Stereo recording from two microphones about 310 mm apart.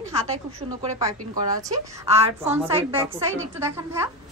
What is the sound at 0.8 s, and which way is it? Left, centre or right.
A woman's voice, centre.